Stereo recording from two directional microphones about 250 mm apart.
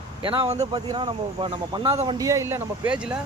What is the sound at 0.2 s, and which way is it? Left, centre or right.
Speech, right.